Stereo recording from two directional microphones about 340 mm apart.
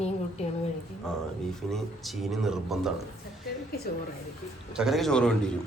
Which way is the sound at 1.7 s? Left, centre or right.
Centre.